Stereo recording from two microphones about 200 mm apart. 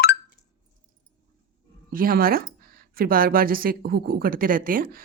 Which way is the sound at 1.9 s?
45° right (ahead or behind).